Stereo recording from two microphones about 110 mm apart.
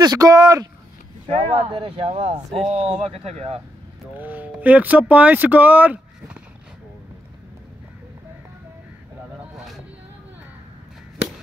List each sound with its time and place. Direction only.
0.0 s speech: 35° right (ahead or behind)
1.3 s speech: 70° right (ahead or behind)
2.7 s speech: 70° right (ahead or behind)
4.2 s speech: 15° right (ahead or behind)